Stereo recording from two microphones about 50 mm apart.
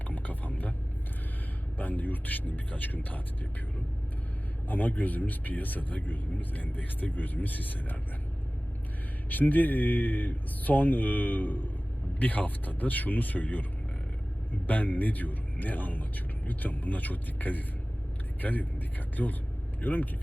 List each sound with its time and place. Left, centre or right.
0.1 s vehicle: left
1.8 s speech: left
4.7 s speech: left
9.3 s speech: left